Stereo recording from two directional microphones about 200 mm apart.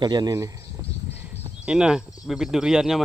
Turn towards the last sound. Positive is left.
turn(degrees=0)  # may be behind; listen again after turning